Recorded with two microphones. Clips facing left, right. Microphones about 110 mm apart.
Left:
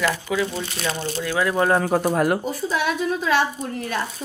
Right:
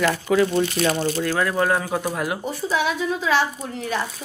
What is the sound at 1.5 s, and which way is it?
Speech, 25° left (ahead or behind).